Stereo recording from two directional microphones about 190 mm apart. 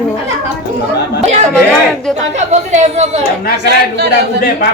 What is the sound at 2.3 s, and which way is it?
Speech, 35° right (ahead or behind).